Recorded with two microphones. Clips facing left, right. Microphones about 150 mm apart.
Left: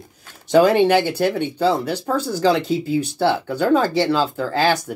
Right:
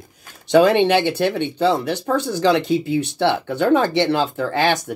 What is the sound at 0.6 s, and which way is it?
Speech, 20° right (ahead or behind).